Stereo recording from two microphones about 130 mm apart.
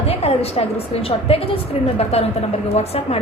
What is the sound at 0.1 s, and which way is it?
A woman's voice, 50° left (ahead or behind).